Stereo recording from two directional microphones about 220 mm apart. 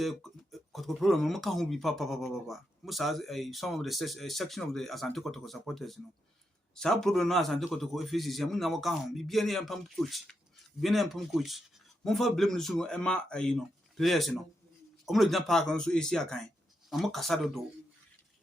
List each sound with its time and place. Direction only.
0.0 s speech: centre (ahead or behind)